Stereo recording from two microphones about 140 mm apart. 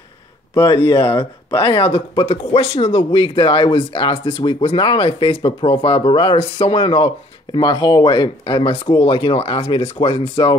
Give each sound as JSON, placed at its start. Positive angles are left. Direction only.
{"t": 0.6, "sound": "speech", "side_deg": 35}